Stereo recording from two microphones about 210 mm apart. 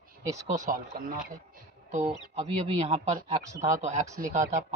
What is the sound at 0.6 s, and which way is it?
Speech, 40° right (ahead or behind).